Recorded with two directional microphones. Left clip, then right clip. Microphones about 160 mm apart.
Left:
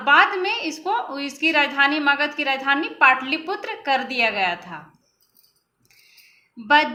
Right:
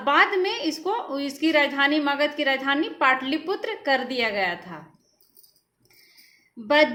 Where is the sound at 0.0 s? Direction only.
20° right (ahead or behind).